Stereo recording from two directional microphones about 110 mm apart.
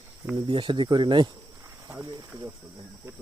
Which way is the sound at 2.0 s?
30° right (ahead or behind).